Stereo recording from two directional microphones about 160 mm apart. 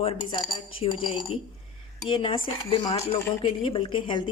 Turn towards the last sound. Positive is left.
turn(degrees=30)  # may be behind; listen again after turning